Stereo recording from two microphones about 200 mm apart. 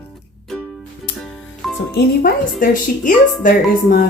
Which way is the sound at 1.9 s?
50° left (ahead or behind).